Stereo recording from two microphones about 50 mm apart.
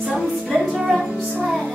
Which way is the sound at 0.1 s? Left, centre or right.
Centre.